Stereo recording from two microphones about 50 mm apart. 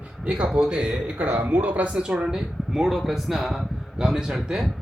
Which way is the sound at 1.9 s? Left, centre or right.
Centre.